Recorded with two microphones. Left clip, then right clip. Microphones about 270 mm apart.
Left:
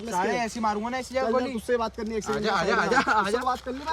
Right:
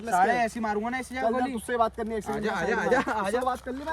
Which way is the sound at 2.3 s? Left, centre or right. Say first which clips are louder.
Left 4 dB; centre.